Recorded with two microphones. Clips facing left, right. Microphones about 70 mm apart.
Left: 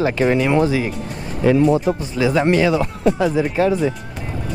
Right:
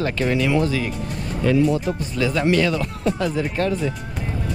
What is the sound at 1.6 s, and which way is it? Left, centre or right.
Speech, centre.